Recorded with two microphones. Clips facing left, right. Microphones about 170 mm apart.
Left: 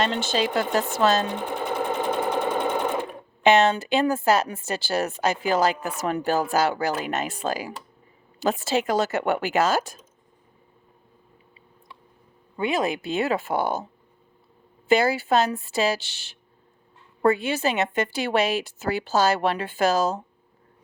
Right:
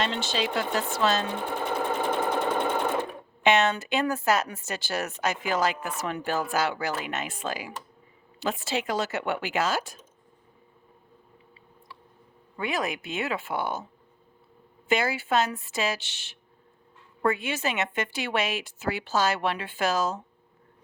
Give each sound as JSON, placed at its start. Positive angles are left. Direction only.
{"t": 0.0, "sound": "speech", "side_deg": 45}
{"t": 1.7, "sound": "sewing machine", "side_deg": 10}
{"t": 3.4, "sound": "speech", "side_deg": 35}
{"t": 12.5, "sound": "speech", "side_deg": 25}
{"t": 14.8, "sound": "speech", "side_deg": 35}